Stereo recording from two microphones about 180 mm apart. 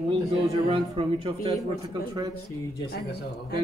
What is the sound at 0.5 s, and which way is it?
Speech, 30° right (ahead or behind).